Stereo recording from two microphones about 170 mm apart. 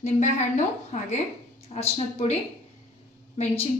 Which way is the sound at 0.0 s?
45° left (ahead or behind).